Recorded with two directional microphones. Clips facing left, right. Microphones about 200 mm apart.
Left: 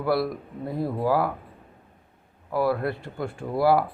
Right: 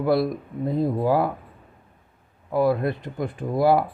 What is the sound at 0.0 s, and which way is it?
Speech, 20° right (ahead or behind).